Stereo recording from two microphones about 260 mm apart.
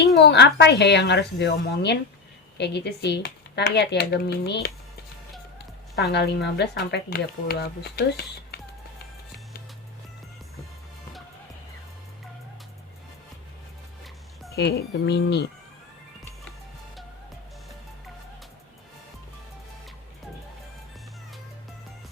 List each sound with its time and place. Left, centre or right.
0.2 s speech: left
6.0 s speech: left
14.5 s speech: left